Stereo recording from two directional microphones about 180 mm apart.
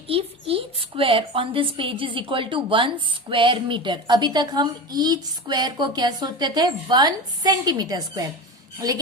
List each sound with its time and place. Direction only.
0.1 s a woman's voice: 30° right (ahead or behind)